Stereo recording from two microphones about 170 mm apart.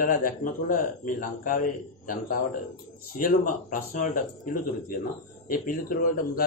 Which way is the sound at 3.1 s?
55° left (ahead or behind).